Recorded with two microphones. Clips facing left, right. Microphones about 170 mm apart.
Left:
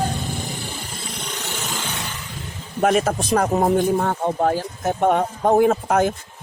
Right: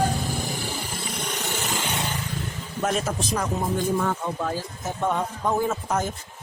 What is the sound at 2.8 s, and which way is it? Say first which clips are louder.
A man's voice: left 7 dB; 70° left (ahead or behind).